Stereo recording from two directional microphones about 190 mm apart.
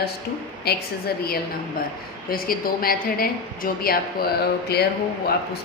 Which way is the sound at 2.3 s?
50° left (ahead or behind).